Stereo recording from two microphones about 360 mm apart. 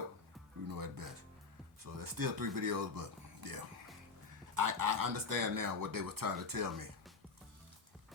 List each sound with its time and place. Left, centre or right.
0.7 s music: right
1.8 s speech: right